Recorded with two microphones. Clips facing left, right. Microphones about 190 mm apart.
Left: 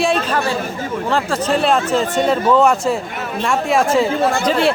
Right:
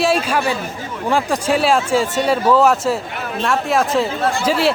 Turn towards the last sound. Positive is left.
turn(degrees=-5)  # may be behind; listen again after turning